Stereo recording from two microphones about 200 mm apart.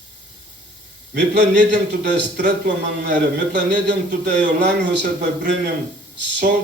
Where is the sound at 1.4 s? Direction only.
40° right (ahead or behind).